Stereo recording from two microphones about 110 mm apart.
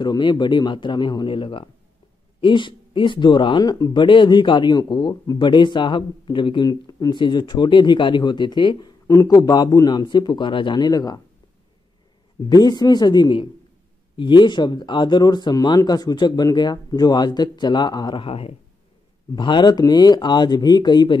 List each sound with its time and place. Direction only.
0.0 s speech: 40° left (ahead or behind)
12.4 s speech: 40° left (ahead or behind)
18.2 s speech: 60° left (ahead or behind)
19.3 s speech: 45° left (ahead or behind)